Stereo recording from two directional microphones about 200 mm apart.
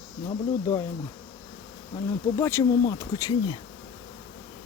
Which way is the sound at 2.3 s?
15° left (ahead or behind).